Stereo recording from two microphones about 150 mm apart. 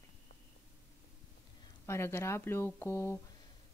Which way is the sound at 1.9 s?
15° left (ahead or behind).